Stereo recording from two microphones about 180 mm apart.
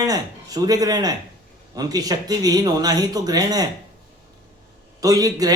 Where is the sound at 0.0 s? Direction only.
20° right (ahead or behind).